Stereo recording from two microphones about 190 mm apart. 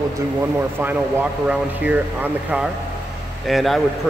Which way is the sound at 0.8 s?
5° right (ahead or behind).